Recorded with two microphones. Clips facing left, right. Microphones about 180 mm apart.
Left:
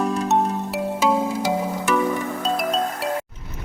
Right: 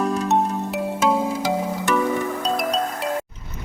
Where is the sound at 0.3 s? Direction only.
Centre (ahead or behind).